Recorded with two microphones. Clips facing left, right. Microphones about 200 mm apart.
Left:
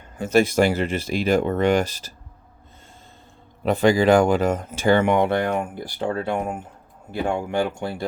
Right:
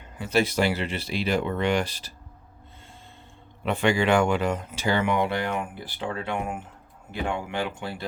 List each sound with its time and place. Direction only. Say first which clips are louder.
0.2 s speech: left 6 dB; 45° left (ahead or behind)
3.6 s speech: left 6 dB; 40° left (ahead or behind)